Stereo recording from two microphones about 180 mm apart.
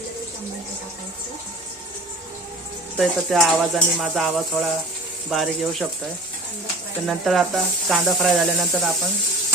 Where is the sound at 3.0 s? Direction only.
Centre (ahead or behind).